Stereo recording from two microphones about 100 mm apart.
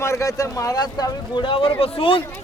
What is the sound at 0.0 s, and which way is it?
Speech, 30° left (ahead or behind).